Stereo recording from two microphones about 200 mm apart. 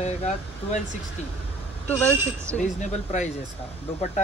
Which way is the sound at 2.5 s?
35° left (ahead or behind).